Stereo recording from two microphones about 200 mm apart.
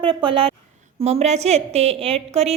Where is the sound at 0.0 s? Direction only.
25° right (ahead or behind).